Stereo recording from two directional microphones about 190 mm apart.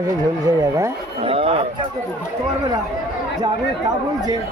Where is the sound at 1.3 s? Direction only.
30° right (ahead or behind).